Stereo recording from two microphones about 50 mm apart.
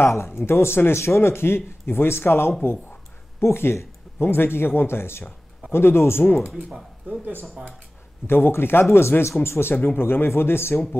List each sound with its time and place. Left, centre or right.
0.0 s speech: left
6.4 s speech: centre
7.1 s speech: right
8.3 s speech: left